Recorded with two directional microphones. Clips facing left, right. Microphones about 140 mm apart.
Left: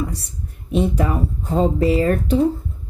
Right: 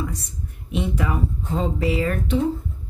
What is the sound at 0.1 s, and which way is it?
Speech, 35° left (ahead or behind).